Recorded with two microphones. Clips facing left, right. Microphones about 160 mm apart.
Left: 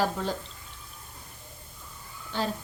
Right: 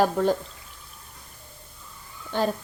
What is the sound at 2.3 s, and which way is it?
Speech, 55° right (ahead or behind).